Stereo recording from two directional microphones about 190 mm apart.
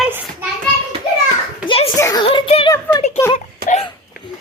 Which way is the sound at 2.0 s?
20° left (ahead or behind).